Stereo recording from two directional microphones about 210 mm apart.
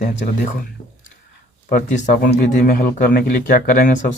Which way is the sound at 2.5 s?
40° left (ahead or behind).